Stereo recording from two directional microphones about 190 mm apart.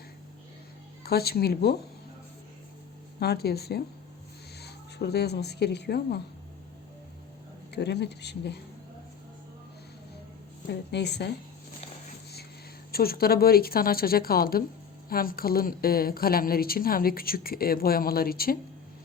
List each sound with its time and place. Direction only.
1.0 s speech: 55° left (ahead or behind)
3.2 s speech: 55° left (ahead or behind)
7.7 s speech: 60° left (ahead or behind)
10.7 s speech: 65° left (ahead or behind)
12.9 s a woman's voice: 55° left (ahead or behind)